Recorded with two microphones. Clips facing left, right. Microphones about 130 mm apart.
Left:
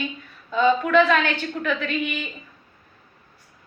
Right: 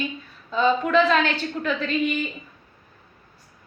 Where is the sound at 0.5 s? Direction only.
35° right (ahead or behind).